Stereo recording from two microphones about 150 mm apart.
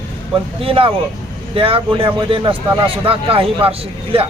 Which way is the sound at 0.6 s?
35° right (ahead or behind).